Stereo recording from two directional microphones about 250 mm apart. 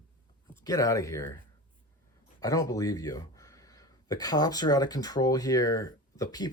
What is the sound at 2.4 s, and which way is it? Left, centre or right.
Speech, centre.